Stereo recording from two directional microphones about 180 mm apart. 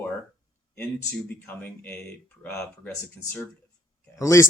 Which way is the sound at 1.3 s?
10° left (ahead or behind).